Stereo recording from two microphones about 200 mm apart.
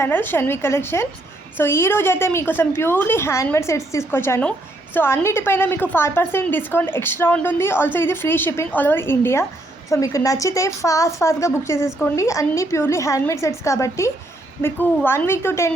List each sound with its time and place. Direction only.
0.0 s a woman's voice: 10° left (ahead or behind)